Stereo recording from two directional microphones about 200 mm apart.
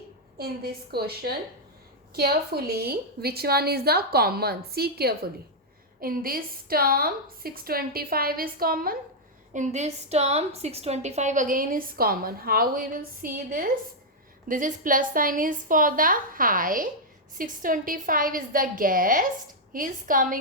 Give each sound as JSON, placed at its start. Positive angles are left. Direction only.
{"t": 0.3, "sound": "a woman's voice", "side_deg": -50}
{"t": 9.5, "sound": "a woman's voice", "side_deg": -35}